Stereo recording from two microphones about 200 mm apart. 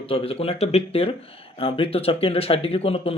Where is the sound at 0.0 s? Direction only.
30° left (ahead or behind).